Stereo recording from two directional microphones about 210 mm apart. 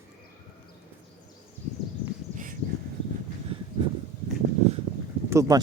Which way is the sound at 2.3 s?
40° right (ahead or behind).